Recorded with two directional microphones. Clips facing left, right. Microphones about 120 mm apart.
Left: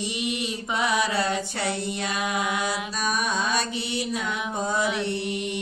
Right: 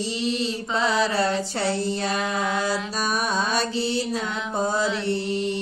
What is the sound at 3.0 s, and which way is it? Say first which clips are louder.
Mantra: even; 35° right (ahead or behind).